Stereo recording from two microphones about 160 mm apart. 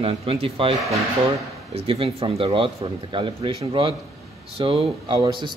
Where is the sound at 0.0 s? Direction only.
35° right (ahead or behind).